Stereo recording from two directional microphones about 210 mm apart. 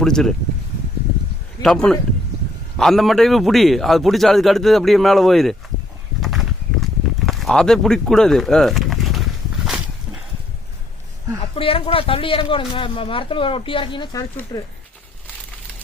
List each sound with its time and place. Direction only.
0.0 s a man's voice: centre (ahead or behind)
1.6 s a man's voice: 5° left (ahead or behind)
6.2 s a sound: centre (ahead or behind)
7.3 s speech: centre (ahead or behind)
11.5 s speech: 25° left (ahead or behind)